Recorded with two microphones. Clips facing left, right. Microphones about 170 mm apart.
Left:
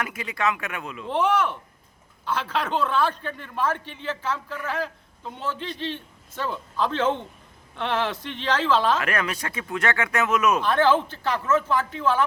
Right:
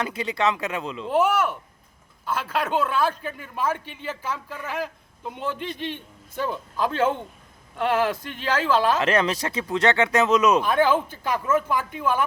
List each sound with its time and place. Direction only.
0.0 s speech: 30° right (ahead or behind)
1.1 s a man's voice: 10° right (ahead or behind)
9.0 s speech: 25° right (ahead or behind)